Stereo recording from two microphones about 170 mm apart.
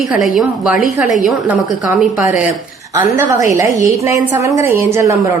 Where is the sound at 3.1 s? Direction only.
20° right (ahead or behind).